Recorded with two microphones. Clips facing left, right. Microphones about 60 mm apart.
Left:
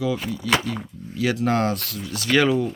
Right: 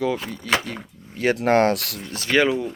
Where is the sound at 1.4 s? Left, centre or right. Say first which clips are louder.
Right 6 dB; right.